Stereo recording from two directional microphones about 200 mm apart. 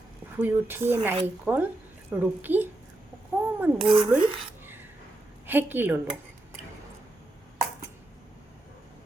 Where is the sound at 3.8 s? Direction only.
25° right (ahead or behind).